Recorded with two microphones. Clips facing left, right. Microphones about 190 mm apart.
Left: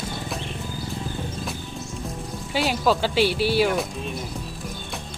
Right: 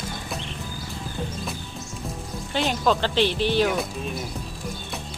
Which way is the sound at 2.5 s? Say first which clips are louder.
Left 1 dB; 5° left (ahead or behind).